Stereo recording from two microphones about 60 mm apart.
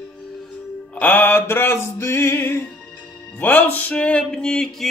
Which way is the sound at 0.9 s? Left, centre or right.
Left.